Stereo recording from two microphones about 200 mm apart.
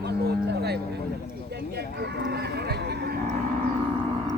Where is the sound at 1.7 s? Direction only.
55° right (ahead or behind).